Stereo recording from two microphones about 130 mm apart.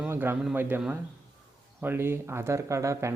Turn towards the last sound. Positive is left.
turn(degrees=-25)  # may be behind; listen again after turning